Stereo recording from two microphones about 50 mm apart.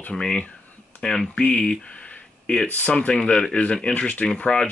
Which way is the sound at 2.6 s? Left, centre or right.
Left.